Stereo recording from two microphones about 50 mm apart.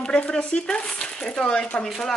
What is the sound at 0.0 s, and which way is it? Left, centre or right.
Speech, centre.